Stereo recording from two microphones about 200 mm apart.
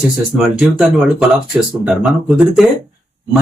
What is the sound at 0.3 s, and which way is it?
Speech, centre (ahead or behind).